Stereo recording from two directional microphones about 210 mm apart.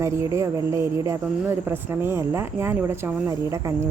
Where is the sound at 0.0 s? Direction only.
15° right (ahead or behind).